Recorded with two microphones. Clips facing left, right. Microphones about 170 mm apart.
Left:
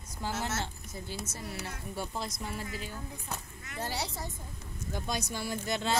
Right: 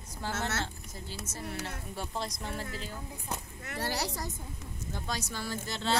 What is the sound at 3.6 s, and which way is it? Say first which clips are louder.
Speech: right 2 dB; 75° right (ahead or behind).